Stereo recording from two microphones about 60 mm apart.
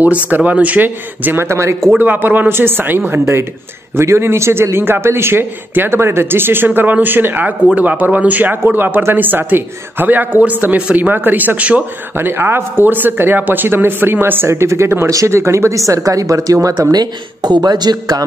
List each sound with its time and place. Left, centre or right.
0.0 s speech: right
1.5 s speech: right
2.0 s speech: right
3.9 s speech: right
12.2 s speech: right
14.5 s speech: right
15.0 s speech: right
15.3 s speech: right
17.9 s a man's voice: right